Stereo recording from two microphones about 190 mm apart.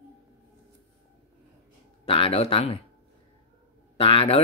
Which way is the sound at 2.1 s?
30° left (ahead or behind).